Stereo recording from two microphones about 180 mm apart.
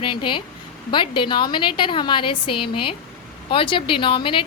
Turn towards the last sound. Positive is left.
turn(degrees=30)  # may be behind; listen again after turning